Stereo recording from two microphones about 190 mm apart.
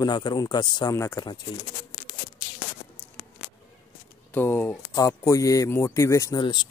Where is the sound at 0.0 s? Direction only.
20° left (ahead or behind).